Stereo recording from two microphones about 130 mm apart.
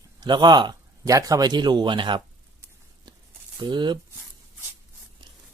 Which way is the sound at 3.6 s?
35° right (ahead or behind).